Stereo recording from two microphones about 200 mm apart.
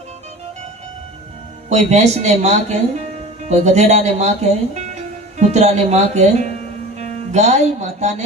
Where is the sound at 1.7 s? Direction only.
35° right (ahead or behind).